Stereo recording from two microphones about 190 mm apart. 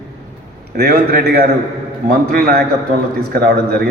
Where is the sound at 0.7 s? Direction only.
50° right (ahead or behind).